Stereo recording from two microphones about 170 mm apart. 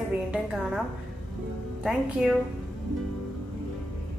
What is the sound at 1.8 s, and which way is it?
Speech, 5° right (ahead or behind).